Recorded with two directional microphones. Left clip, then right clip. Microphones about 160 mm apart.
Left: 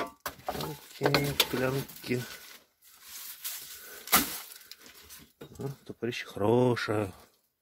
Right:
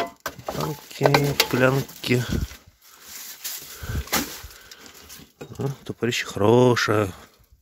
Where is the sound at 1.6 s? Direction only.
45° right (ahead or behind).